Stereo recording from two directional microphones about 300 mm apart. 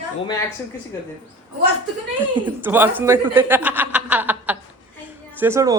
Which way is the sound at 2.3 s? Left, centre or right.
Centre.